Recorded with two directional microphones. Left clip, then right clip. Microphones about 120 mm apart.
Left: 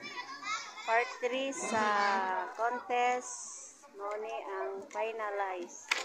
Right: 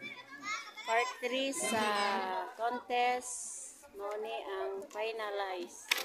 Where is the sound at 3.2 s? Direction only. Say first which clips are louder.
Left 1 dB; 55° right (ahead or behind).